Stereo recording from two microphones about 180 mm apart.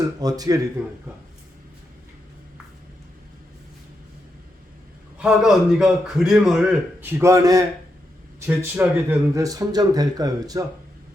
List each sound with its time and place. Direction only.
0.2 s speech: 20° right (ahead or behind)
5.1 s a man's voice: 5° right (ahead or behind)